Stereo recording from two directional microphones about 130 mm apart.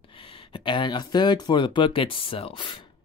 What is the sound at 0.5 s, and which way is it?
Speech, 40° left (ahead or behind).